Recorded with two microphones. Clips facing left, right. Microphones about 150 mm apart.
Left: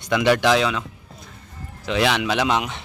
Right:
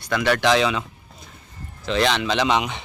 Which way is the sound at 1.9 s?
10° left (ahead or behind).